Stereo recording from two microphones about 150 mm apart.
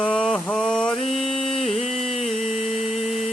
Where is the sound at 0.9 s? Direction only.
45° left (ahead or behind).